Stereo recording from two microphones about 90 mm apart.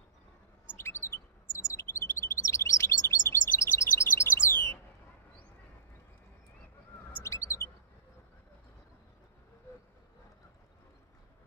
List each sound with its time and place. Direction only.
0.7 s bird: 30° left (ahead or behind)
1.7 s chirp: 30° left (ahead or behind)
7.2 s bird: 35° left (ahead or behind)